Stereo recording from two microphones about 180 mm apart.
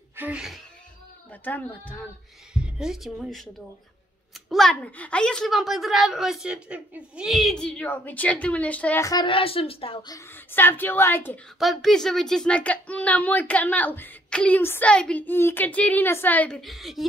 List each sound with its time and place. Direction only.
0.1 s speech: 10° right (ahead or behind)
1.3 s speech: 10° left (ahead or behind)
2.5 s a woman's voice: 5° right (ahead or behind)
4.5 s a woman's voice: 5° left (ahead or behind)
9.1 s a woman's voice: 25° left (ahead or behind)
10.1 s speech: 10° left (ahead or behind)
11.6 s speech: centre (ahead or behind)